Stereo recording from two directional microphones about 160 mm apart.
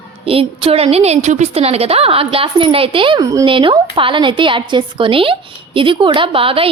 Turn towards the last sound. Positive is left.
turn(degrees=-35)  # may be behind; listen again after turning